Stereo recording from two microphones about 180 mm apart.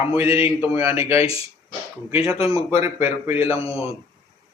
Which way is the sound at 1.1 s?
30° left (ahead or behind).